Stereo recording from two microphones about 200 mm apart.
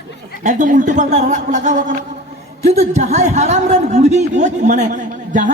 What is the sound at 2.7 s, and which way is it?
A man's voice, 35° right (ahead or behind).